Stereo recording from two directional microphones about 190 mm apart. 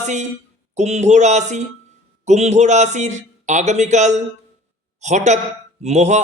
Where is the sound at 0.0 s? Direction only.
40° right (ahead or behind).